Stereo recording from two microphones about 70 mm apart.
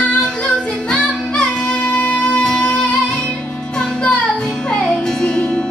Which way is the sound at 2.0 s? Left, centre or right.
Centre.